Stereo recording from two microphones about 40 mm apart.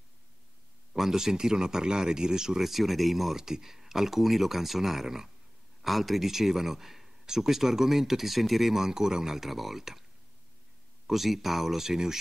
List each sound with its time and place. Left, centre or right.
0.9 s speech: centre
2.7 s speech: centre
11.1 s speech: centre